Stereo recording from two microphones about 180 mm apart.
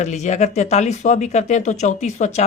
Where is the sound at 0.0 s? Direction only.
40° left (ahead or behind).